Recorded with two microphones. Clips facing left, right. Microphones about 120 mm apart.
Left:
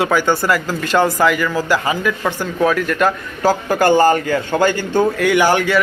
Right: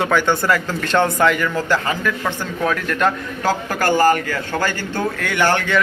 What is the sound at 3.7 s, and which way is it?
A man's voice, 20° left (ahead or behind).